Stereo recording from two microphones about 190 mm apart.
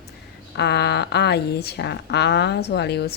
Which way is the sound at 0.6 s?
60° left (ahead or behind).